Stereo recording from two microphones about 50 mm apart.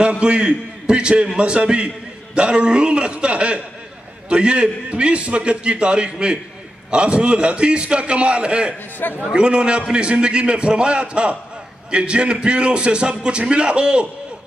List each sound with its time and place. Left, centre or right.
0.0 s a man's voice: centre